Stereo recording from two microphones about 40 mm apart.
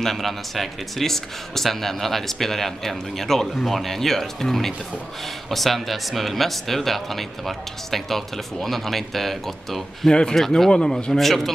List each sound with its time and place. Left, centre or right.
0.0 s speech: centre
10.0 s speech: centre
11.1 s speech: centre